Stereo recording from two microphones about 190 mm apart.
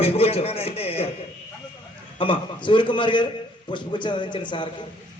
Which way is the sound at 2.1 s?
25° left (ahead or behind).